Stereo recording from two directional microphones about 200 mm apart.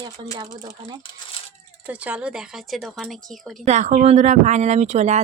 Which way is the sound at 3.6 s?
35° right (ahead or behind).